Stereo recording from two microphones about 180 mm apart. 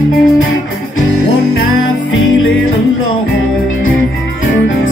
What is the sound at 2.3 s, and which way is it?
Music, 90° left.